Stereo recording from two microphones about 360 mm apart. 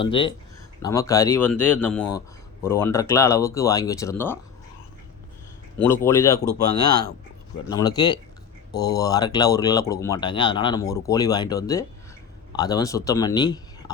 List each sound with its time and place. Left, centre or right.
0.0 s speech: centre
5.8 s speech: centre
7.7 s speech: centre